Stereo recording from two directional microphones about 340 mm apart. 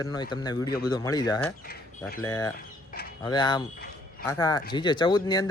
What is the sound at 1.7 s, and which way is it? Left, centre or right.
Speech, left.